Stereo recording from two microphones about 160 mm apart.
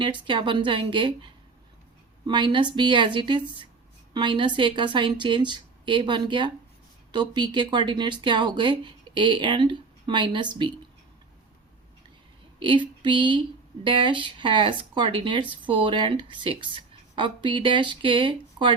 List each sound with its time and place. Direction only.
0.0 s speech: 30° right (ahead or behind)
12.5 s a sound: 30° right (ahead or behind)
13.8 s speech: 30° right (ahead or behind)